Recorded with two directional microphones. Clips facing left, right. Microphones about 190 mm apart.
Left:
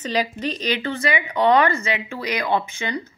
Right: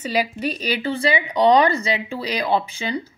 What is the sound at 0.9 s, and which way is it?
Speech, 30° right (ahead or behind).